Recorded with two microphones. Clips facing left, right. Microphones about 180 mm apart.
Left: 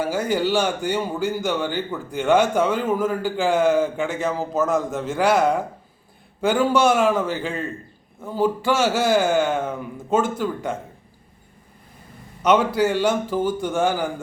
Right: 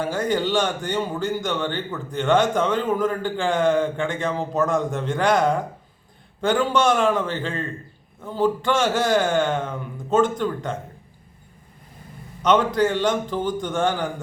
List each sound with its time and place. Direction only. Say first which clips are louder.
0.0 s a man's voice: left 1 dB; 10° left (ahead or behind)
12.4 s a man's voice: left 1 dB; 10° left (ahead or behind)